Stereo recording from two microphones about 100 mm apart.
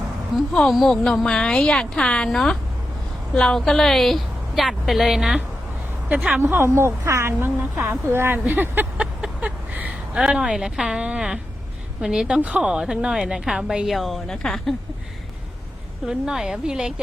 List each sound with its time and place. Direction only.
0.5 s a woman's voice: centre (ahead or behind)
6.1 s speech: 15° right (ahead or behind)
9.2 s a sound: 15° right (ahead or behind)
10.2 s a woman's voice: 5° right (ahead or behind)
16.0 s a woman's voice: 5° right (ahead or behind)